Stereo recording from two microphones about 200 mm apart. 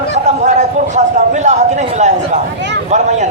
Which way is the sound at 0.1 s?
35° right (ahead or behind).